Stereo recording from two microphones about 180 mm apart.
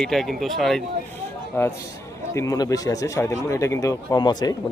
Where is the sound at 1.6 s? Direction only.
15° left (ahead or behind).